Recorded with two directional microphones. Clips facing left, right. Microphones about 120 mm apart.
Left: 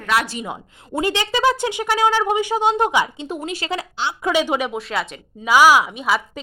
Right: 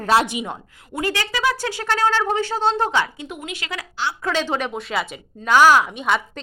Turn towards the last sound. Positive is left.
turn(degrees=0)  # may be behind; listen again after turning